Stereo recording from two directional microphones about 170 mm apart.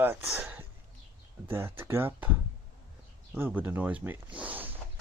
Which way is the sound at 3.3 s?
10° right (ahead or behind).